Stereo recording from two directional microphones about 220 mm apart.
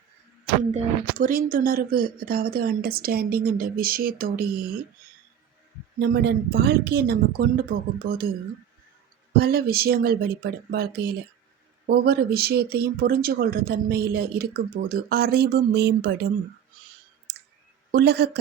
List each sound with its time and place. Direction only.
0.7 s speech: 40° right (ahead or behind)
6.0 s speech: 50° right (ahead or behind)
9.3 s speech: 45° right (ahead or behind)
17.3 s clicking: 50° right (ahead or behind)
17.9 s speech: 50° right (ahead or behind)